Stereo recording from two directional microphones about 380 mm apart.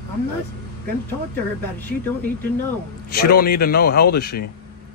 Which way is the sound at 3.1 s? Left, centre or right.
Left.